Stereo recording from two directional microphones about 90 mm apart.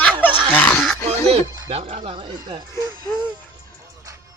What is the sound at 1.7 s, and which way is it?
Speech, 85° right.